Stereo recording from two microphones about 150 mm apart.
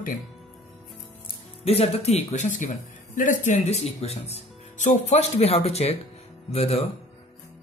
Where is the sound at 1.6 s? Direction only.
40° left (ahead or behind).